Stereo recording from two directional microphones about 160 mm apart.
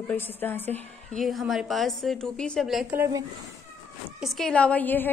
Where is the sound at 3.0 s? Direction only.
20° right (ahead or behind).